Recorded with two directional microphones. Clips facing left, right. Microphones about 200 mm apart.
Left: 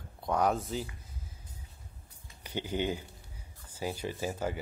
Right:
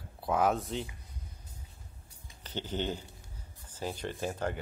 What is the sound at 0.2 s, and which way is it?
Speech, centre (ahead or behind).